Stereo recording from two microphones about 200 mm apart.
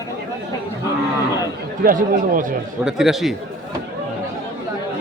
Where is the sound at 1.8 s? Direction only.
45° right (ahead or behind).